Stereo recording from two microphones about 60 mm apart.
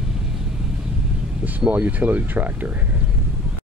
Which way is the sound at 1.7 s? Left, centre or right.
Right.